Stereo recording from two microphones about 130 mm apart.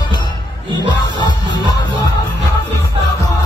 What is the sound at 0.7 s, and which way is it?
Music, 35° left (ahead or behind).